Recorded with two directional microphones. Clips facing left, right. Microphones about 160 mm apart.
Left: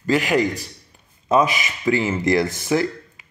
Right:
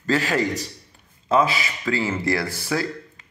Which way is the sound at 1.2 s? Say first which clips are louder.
Left 2 dB; 20° left (ahead or behind).